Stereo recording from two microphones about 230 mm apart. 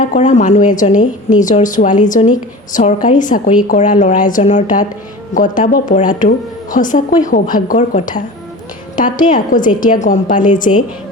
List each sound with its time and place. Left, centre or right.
0.0 s a woman's voice: left